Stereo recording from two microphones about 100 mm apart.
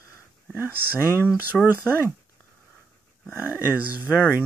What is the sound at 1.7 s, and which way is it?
Speech, 20° right (ahead or behind).